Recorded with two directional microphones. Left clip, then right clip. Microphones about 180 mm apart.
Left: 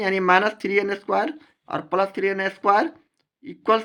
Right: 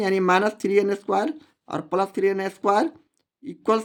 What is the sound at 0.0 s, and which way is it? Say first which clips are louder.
Speech: left 2 dB; 40° right (ahead or behind).